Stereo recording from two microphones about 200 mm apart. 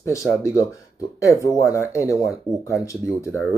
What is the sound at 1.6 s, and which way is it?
Speech, 15° left (ahead or behind).